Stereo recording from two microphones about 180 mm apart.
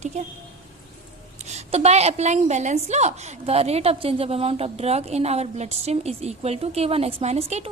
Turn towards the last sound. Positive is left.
turn(degrees=-35)  # may be behind; listen again after turning